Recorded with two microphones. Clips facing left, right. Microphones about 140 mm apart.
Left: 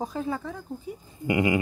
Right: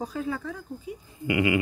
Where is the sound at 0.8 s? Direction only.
30° left (ahead or behind).